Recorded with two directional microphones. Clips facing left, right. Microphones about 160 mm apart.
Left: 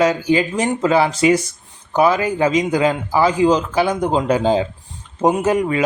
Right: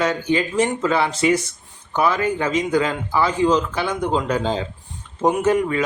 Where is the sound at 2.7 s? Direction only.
35° left (ahead or behind).